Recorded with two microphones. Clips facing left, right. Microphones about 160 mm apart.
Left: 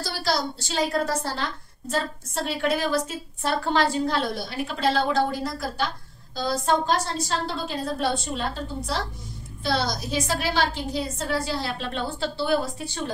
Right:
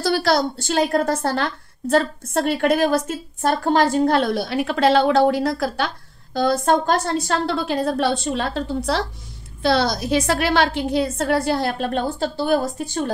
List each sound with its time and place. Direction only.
0.0 s a woman's voice: 60° right (ahead or behind)
6.3 s a woman's voice: 60° right (ahead or behind)